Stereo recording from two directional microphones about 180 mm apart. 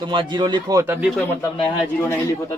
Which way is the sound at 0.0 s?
25° right (ahead or behind).